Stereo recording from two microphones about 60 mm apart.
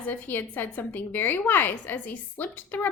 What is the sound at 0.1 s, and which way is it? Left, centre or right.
A woman's voice, left.